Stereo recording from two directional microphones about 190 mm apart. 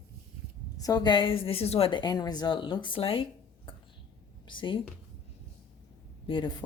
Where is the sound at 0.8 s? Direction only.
20° left (ahead or behind).